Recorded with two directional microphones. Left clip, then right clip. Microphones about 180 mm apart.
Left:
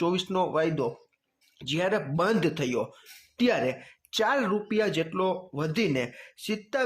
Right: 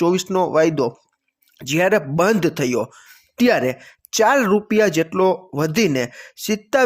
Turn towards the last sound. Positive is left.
turn(degrees=-35)  # may be behind; listen again after turning